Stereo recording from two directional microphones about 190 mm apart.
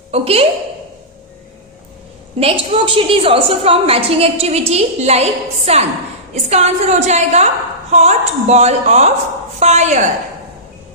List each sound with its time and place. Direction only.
0.1 s a woman's voice: 30° right (ahead or behind)
2.4 s a woman's voice: 30° right (ahead or behind)